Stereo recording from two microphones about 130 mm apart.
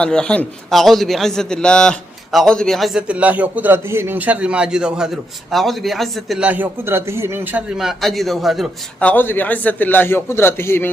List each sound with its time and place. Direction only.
0.0 s a man's voice: 5° left (ahead or behind)
6.4 s a man's voice: 15° right (ahead or behind)
9.0 s a man's voice: 15° left (ahead or behind)